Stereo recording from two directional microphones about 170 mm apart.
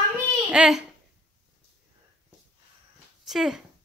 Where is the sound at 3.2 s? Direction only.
Centre (ahead or behind).